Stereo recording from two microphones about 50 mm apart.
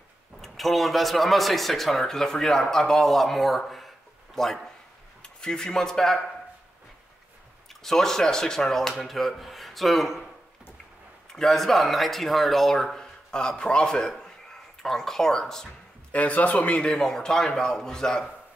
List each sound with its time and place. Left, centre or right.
0.4 s a man's voice: centre
7.8 s a man's voice: centre
11.3 s speech: centre
16.1 s a man's voice: left
16.8 s speech: centre